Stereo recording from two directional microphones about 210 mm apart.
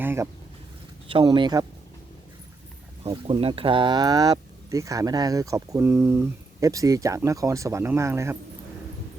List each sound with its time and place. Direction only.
0.0 s a sound: 10° right (ahead or behind)
1.0 s speech: 20° right (ahead or behind)
3.0 s speech: 25° right (ahead or behind)